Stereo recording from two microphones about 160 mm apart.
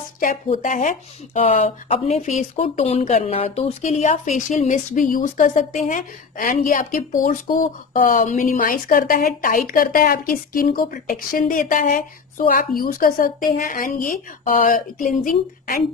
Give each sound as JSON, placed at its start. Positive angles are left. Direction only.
{"t": 0.2, "sound": "speech", "side_deg": 55}